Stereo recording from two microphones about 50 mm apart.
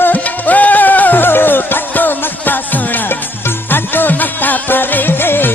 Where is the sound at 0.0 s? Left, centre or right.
Left.